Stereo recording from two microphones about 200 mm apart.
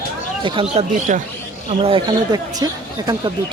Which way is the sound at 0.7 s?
35° right (ahead or behind).